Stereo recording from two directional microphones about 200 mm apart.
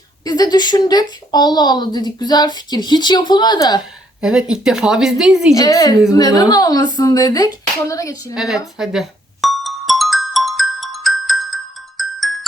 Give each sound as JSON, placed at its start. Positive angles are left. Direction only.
{"t": 0.3, "sound": "a woman's voice", "side_deg": 20}
{"t": 4.2, "sound": "speech", "side_deg": -5}
{"t": 5.5, "sound": "speech", "side_deg": 15}
{"t": 8.4, "sound": "music", "side_deg": 0}